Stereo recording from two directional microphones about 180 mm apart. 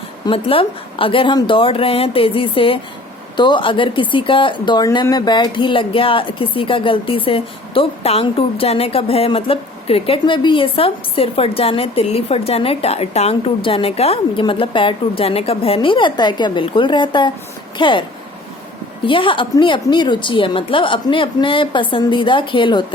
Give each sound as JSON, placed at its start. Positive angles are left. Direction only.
{"t": 0.3, "sound": "speech", "side_deg": 30}
{"t": 19.0, "sound": "speech", "side_deg": 30}